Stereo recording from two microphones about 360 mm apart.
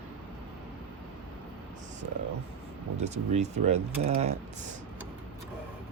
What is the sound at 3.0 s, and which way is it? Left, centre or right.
Speech, centre.